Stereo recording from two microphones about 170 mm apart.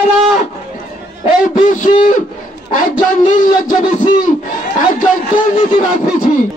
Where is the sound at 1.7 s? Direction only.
50° left (ahead or behind).